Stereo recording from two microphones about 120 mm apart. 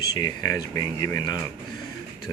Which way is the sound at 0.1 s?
30° left (ahead or behind).